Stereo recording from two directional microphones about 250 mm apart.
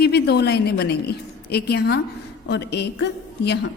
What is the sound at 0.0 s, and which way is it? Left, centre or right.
A woman's voice, left.